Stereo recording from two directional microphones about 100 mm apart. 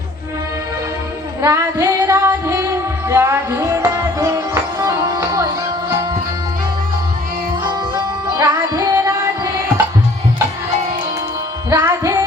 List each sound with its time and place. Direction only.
1.4 s music: 30° right (ahead or behind)
7.6 s music: 45° right (ahead or behind)
11.7 s music: 30° right (ahead or behind)